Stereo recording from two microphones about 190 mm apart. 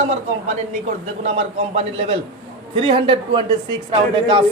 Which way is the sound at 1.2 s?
35° right (ahead or behind).